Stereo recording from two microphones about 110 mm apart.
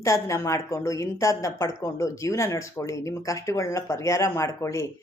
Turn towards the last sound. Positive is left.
turn(degrees=25)  # may be behind; listen again after turning